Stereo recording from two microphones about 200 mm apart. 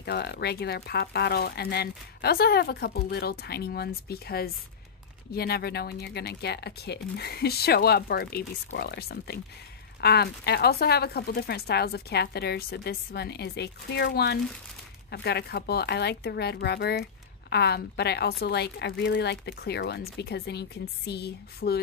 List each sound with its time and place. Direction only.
0.0 s speech: 55° left (ahead or behind)